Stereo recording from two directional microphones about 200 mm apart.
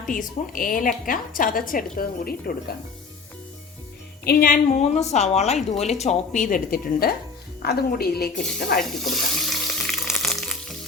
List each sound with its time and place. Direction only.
0.1 s speech: 40° left (ahead or behind)
4.2 s a woman's voice: 50° left (ahead or behind)
8.8 s water tap: centre (ahead or behind)